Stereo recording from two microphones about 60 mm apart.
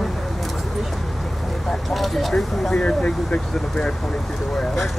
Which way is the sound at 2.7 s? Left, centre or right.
Centre.